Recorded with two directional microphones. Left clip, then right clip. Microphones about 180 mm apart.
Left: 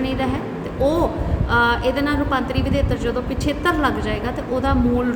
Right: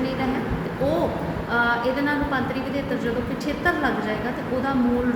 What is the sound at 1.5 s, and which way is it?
A woman's voice, 40° left (ahead or behind).